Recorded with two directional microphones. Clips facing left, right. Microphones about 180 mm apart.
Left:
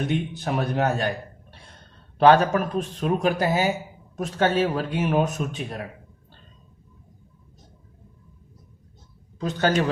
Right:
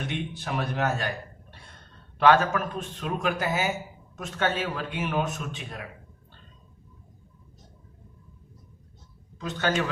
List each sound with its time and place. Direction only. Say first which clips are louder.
0.1 s a man's voice: left 6 dB; 40° left (ahead or behind)
2.1 s a man's voice: left 4 dB; 35° left (ahead or behind)
9.4 s a man's voice: left 5 dB; 40° left (ahead or behind)